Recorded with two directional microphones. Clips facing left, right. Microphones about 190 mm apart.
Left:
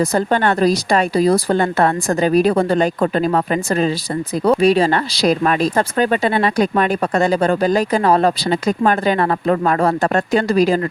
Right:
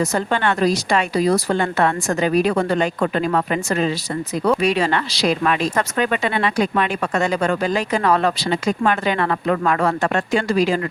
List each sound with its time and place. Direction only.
0.0 s speech: 35° left (ahead or behind)